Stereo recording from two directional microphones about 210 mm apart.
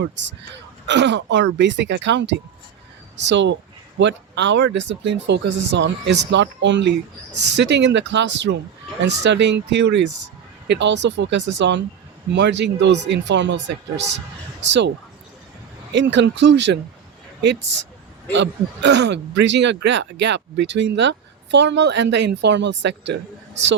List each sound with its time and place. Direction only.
0.0 s speech: 60° right (ahead or behind)